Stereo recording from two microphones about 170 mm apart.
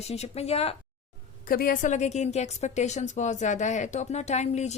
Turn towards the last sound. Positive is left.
turn(degrees=40)  # may be behind; listen again after turning